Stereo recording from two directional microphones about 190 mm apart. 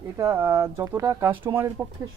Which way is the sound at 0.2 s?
15° right (ahead or behind).